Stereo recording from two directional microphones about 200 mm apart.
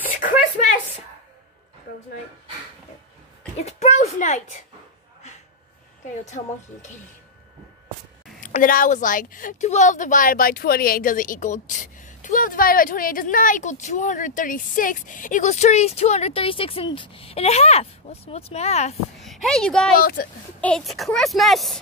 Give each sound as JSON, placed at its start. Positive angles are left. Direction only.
{"t": 3.5, "sound": "a sound", "side_deg": 35}
{"t": 6.2, "sound": "a woman's voice", "side_deg": 35}
{"t": 8.4, "sound": "a woman's voice", "side_deg": 40}
{"t": 19.1, "sound": "a sound", "side_deg": 0}
{"t": 20.0, "sound": "speech", "side_deg": 45}
{"t": 20.6, "sound": "speech", "side_deg": 0}